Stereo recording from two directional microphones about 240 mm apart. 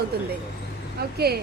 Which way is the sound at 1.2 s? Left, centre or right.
Right.